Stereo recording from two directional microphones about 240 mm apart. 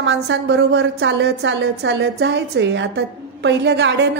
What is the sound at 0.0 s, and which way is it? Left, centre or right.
A woman's voice, right.